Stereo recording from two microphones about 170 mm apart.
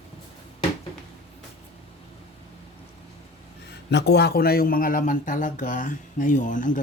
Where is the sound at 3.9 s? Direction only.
75° left (ahead or behind).